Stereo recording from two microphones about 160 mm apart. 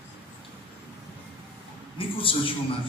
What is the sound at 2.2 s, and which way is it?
Speech, 35° left (ahead or behind).